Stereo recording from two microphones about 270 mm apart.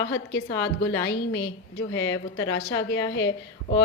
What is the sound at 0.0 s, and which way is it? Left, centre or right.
A woman's voice, left.